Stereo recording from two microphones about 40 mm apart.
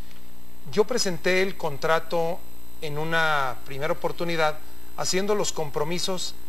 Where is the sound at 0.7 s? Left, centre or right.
Centre.